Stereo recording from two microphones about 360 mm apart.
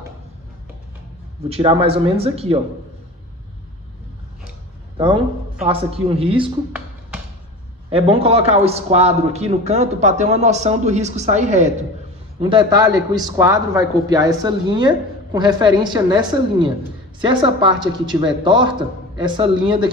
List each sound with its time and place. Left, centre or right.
1.5 s speech: centre
4.9 s a man's voice: centre